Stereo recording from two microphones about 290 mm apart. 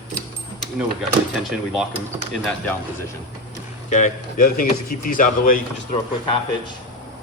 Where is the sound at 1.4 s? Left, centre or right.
Centre.